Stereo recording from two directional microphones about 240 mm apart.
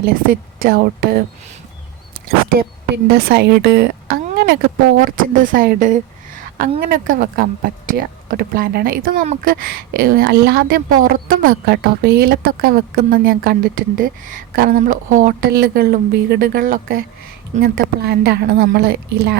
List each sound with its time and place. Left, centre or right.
0.0 s a woman's voice: right
2.6 s speech: right